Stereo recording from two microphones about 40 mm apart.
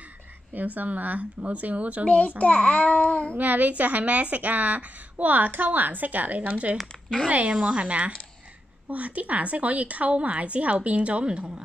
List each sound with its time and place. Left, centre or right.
0.6 s speech: right
2.0 s a child's voice: left
3.3 s a woman's voice: right